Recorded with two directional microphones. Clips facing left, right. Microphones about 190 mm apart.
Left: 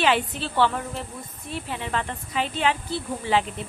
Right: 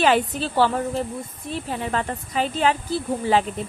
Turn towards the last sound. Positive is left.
turn(degrees=-40)  # may be behind; listen again after turning